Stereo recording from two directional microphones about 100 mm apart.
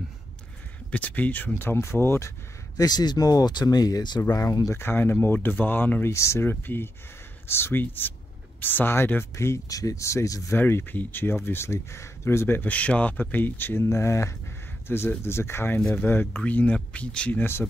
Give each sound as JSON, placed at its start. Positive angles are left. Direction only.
{"t": 0.9, "sound": "speech", "side_deg": 15}
{"t": 2.8, "sound": "speech", "side_deg": 45}
{"t": 10.6, "sound": "speech", "side_deg": 20}